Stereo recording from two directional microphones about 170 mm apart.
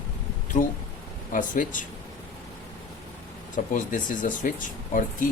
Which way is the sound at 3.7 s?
50° left (ahead or behind).